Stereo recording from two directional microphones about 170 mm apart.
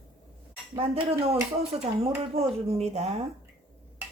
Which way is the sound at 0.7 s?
35° right (ahead or behind).